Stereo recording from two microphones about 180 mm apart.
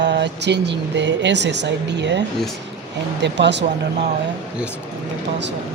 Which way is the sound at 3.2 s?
75° right (ahead or behind).